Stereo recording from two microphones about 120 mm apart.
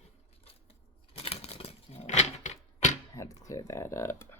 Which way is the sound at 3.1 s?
25° left (ahead or behind).